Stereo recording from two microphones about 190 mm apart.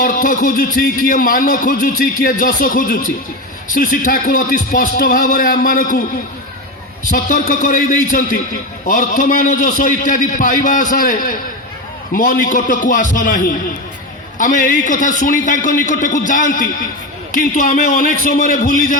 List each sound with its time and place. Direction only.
0.0 s speech: 45° left (ahead or behind)
7.1 s speech: 45° left (ahead or behind)